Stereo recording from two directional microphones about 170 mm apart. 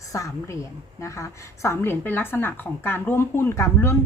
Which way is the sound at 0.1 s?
20° left (ahead or behind).